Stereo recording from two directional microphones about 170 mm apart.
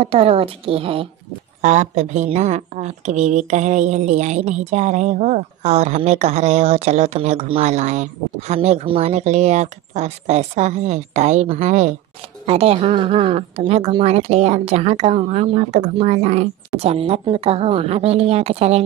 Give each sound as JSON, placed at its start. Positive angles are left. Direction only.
{"t": 0.0, "sound": "a woman's voice", "side_deg": -35}
{"t": 1.6, "sound": "a woman's voice", "side_deg": -45}